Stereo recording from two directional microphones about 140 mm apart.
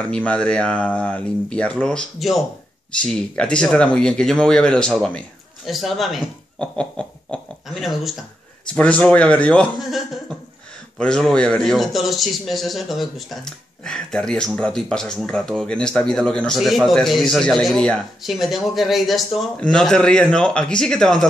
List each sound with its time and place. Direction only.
0.1 s a man's voice: 10° left (ahead or behind)